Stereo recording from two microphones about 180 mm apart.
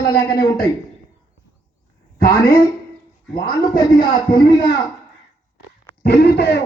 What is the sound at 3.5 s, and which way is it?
A man's voice, 25° left (ahead or behind).